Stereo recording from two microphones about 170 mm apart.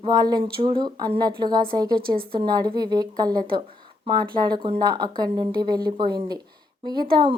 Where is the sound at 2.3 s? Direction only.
30° right (ahead or behind).